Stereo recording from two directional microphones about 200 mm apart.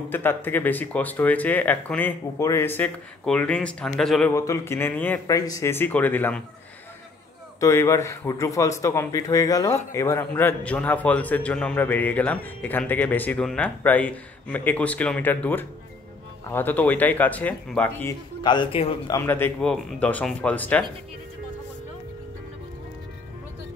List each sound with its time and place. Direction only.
0.1 s a man's voice: 10° left (ahead or behind)
4.3 s a man's voice: 15° left (ahead or behind)
7.6 s a man's voice: 15° left (ahead or behind)
18.4 s a man's voice: 25° left (ahead or behind)
19.1 s a man's voice: 10° left (ahead or behind)